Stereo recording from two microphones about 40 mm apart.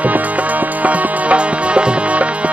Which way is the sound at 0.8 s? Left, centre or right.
Right.